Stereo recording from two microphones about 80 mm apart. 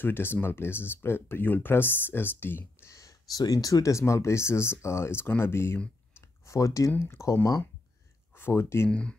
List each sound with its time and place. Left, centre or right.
0.0 s speech: left
2.9 s speech: left
4.0 s speech: left
8.4 s speech: left